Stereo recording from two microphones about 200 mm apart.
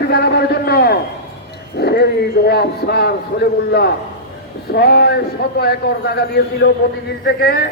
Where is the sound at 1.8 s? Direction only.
50° left (ahead or behind).